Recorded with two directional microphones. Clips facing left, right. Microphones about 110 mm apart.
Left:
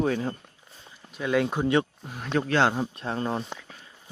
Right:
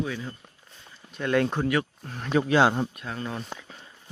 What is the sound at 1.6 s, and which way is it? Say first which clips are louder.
Speech: left 2 dB; 25° left (ahead or behind).